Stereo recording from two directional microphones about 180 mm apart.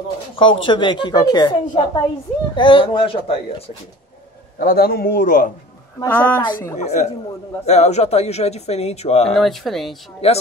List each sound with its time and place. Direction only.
0.7 s a woman's voice: 25° left (ahead or behind)
4.6 s a man's voice: 55° left (ahead or behind)
6.0 s speech: 10° left (ahead or behind)
6.8 s speech: 40° left (ahead or behind)
9.3 s speech: centre (ahead or behind)
10.2 s speech: 35° left (ahead or behind)